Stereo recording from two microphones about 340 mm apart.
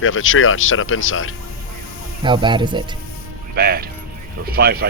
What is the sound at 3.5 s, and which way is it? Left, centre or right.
Speech, right.